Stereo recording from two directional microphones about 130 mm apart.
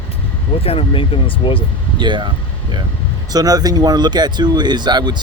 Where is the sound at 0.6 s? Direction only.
45° left (ahead or behind).